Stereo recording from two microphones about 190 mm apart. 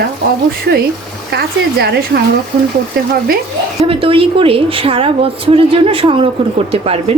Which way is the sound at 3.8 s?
30° right (ahead or behind).